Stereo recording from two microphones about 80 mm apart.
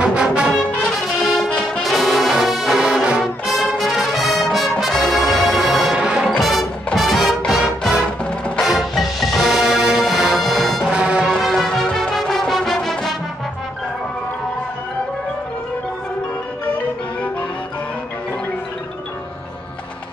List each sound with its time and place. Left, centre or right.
0.0 s music: centre
1.5 s brass instrument: centre
6.4 s music: centre
10.9 s music: centre
11.2 s music: centre
16.6 s music: left